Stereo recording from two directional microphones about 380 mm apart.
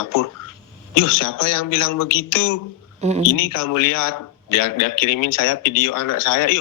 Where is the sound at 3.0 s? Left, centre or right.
Centre.